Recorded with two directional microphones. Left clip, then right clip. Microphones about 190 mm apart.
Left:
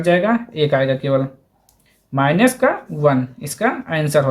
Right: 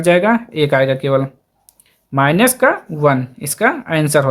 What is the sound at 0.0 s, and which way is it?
Speech, 45° right (ahead or behind).